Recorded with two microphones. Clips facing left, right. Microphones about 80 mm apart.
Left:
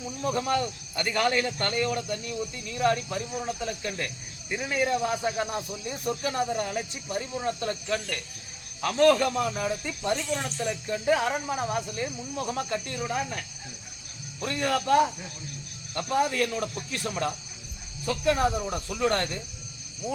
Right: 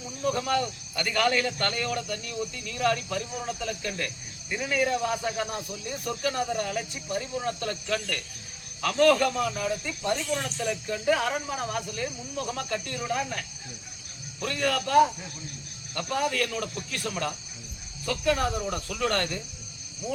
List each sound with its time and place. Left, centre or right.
0.3 s a man's voice: left
10.4 s music: centre
11.2 s a man's voice: left
14.4 s a man's voice: left